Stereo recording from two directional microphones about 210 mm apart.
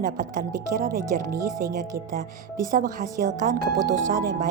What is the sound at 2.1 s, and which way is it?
Speech, 40° right (ahead or behind).